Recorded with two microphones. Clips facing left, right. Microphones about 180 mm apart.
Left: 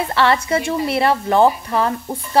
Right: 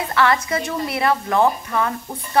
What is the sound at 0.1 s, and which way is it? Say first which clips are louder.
A woman's voice: left 1 dB; 30° left (ahead or behind).